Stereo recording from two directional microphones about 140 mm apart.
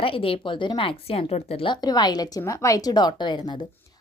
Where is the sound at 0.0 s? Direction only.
40° left (ahead or behind).